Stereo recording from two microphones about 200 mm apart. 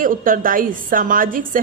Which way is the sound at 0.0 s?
45° right (ahead or behind).